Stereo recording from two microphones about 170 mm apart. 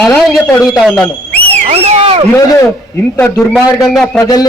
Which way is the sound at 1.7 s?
40° right (ahead or behind).